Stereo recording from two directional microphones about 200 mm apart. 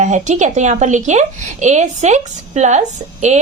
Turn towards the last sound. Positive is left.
turn(degrees=-35)  # may be behind; listen again after turning